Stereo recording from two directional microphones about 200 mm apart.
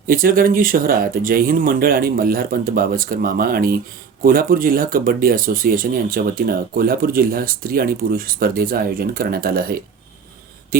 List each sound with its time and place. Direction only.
0.1 s speech: 45° right (ahead or behind)